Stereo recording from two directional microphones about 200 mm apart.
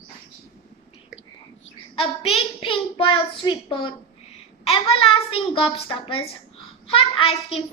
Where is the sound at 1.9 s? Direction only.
30° left (ahead or behind).